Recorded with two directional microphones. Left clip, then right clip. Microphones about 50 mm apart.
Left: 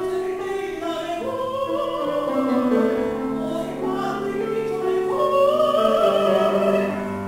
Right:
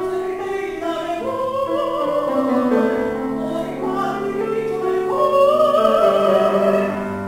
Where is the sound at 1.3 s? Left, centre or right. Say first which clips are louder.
Right 4 dB; centre.